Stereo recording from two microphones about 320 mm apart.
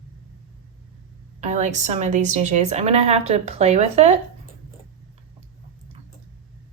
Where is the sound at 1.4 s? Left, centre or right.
Right.